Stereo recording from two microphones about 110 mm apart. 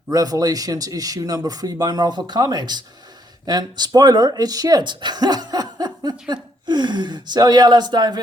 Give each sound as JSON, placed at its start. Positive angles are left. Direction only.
{"t": 0.1, "sound": "speech", "side_deg": -35}